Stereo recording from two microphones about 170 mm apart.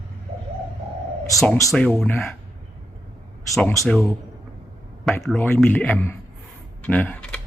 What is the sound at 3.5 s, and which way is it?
Speech, 5° left (ahead or behind).